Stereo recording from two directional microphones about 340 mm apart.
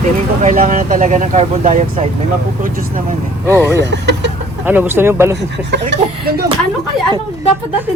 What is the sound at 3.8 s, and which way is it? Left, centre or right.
Speech, right.